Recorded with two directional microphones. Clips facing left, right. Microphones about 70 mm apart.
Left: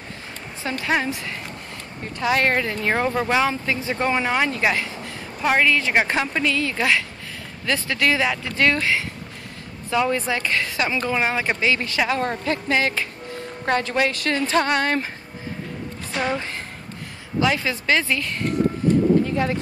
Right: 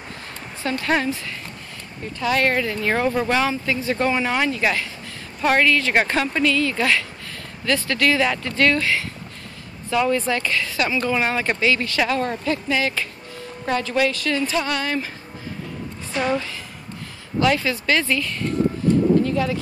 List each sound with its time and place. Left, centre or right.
0.7 s speech: centre
2.1 s speech: left
5.4 s speech: centre; by 15.0 s left
16.3 s a sound: left
17.4 s speech: centre; by 19.6 s left